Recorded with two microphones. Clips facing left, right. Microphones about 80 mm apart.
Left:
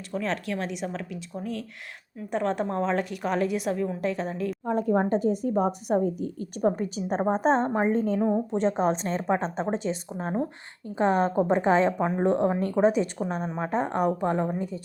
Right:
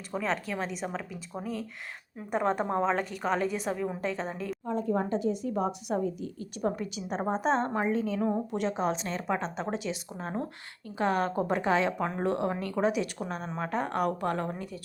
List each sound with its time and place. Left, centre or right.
0.1 s a woman's voice: centre
2.3 s a woman's voice: centre
2.9 s a woman's voice: centre
4.6 s a woman's voice: left
7.6 s a woman's voice: left
7.9 s a woman's voice: left